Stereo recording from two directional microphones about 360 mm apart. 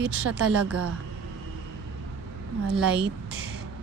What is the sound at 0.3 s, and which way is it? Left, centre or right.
Speech, right.